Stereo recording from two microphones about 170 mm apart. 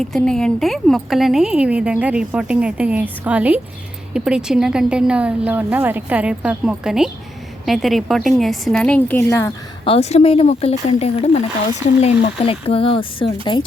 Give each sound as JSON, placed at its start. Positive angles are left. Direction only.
{"t": 0.0, "sound": "a woman's voice", "side_deg": 5}
{"t": 9.8, "sound": "speech", "side_deg": 35}